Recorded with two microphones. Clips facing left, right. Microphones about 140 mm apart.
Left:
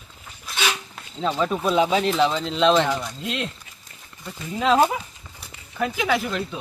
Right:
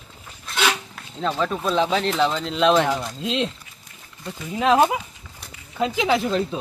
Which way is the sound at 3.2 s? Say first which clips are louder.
Right 4 dB; 25° right (ahead or behind).